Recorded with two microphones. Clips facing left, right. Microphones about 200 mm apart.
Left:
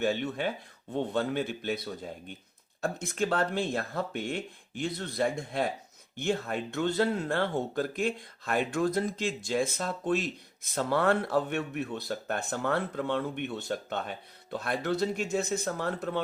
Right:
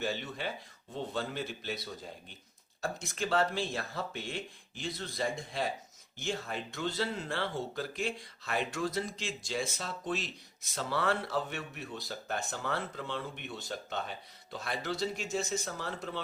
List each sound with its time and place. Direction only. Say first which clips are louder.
0.0 s speech: left 7 dB; 55° left (ahead or behind)